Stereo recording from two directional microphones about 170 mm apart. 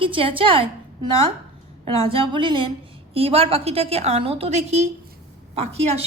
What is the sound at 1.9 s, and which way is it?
A woman's voice, 30° right (ahead or behind).